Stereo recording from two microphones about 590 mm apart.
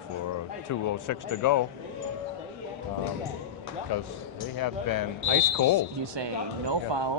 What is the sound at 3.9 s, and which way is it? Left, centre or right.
Speech, left.